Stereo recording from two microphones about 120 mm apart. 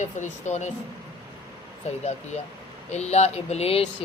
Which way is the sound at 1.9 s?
65° left (ahead or behind).